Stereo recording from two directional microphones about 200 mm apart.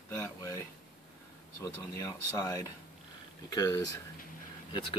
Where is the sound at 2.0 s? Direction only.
15° left (ahead or behind).